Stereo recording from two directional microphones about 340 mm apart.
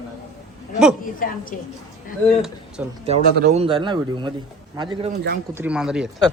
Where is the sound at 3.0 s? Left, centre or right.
Centre.